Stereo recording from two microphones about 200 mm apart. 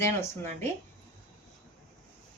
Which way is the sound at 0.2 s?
10° left (ahead or behind).